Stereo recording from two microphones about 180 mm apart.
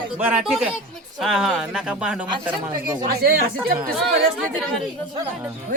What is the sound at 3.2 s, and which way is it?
Speech, 55° right (ahead or behind).